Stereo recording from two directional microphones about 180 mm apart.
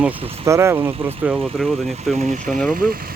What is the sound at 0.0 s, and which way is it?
Speech, 15° right (ahead or behind).